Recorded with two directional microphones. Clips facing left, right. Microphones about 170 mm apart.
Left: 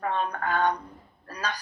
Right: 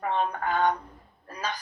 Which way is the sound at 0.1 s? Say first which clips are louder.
Right 3 dB; 20° right (ahead or behind).